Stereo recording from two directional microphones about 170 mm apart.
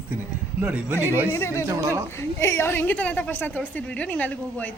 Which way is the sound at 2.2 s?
15° left (ahead or behind).